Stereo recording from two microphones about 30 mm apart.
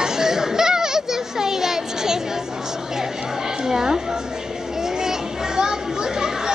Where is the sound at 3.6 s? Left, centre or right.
Centre.